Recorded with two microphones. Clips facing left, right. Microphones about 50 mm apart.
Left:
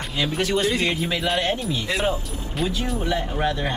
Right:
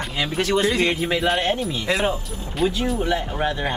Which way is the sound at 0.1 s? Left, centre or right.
Centre.